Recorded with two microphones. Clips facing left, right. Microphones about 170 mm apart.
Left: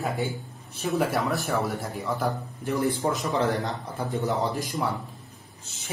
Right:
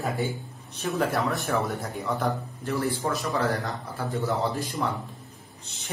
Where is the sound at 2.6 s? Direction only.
15° left (ahead or behind).